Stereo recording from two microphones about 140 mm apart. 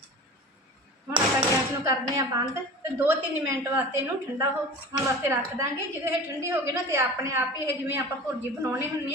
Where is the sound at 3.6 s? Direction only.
20° right (ahead or behind).